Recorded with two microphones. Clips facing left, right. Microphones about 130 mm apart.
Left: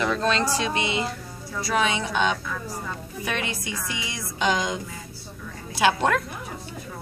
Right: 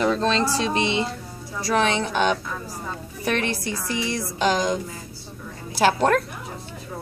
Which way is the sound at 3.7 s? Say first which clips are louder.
Right 6 dB; 35° right (ahead or behind).